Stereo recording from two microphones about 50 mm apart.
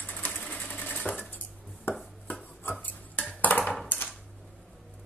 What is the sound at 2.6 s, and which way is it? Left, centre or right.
Cutlery, left.